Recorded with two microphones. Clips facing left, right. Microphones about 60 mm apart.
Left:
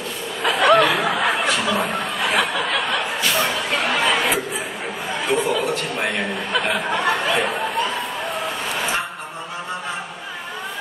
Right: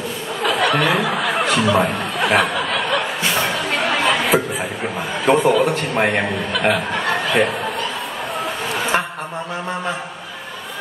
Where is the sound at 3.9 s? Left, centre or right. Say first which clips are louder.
Right 3 dB; right.